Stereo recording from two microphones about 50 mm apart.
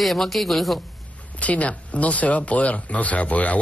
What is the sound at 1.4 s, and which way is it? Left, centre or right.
Speech, left.